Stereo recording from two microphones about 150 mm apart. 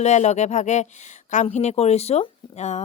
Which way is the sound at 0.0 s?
50° left (ahead or behind).